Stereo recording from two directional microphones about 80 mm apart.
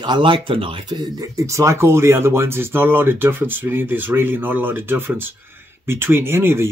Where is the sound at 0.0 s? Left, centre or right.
Right.